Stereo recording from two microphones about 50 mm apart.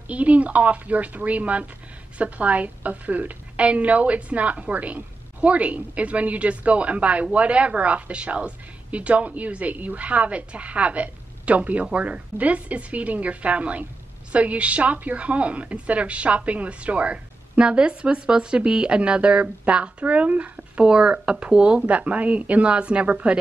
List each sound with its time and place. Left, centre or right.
0.1 s a woman's voice: right